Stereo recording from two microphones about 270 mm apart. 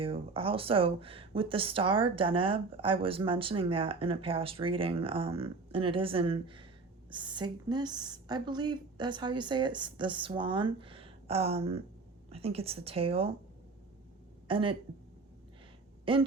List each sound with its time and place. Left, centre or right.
0.0 s a woman's voice: centre
14.4 s speech: centre
16.1 s speech: centre